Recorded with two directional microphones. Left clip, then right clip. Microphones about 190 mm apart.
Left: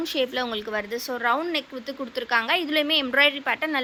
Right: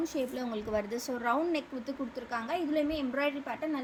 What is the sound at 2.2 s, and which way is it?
Speech, 20° left (ahead or behind).